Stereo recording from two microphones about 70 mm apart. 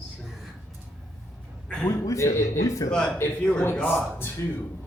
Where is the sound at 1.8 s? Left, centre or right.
Left.